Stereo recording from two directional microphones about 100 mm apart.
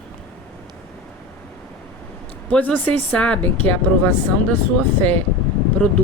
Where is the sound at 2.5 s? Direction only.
15° left (ahead or behind).